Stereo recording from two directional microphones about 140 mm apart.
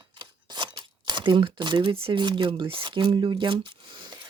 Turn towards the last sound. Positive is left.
turn(degrees=-30)  # may be behind; listen again after turning